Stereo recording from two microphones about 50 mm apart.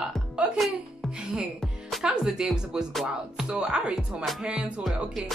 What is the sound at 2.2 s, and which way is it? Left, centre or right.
Speech, centre.